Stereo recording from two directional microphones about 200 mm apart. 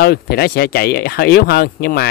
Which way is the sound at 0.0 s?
50° left (ahead or behind).